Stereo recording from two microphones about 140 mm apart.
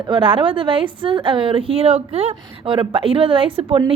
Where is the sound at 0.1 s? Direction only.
35° right (ahead or behind).